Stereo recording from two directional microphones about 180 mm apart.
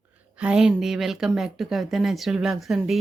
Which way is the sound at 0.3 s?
5° right (ahead or behind).